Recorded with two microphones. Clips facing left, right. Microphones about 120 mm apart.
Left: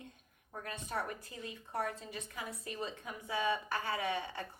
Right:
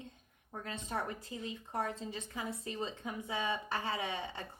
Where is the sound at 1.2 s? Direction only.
20° right (ahead or behind).